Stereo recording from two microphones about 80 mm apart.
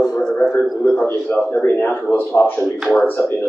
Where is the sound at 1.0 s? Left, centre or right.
Left.